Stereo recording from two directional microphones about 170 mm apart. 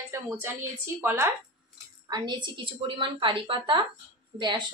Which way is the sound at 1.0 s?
15° right (ahead or behind).